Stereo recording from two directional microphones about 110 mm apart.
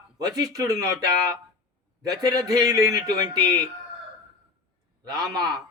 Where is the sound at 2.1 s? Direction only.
35° right (ahead or behind).